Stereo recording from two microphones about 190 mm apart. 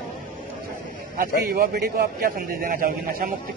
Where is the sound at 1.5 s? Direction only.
50° right (ahead or behind).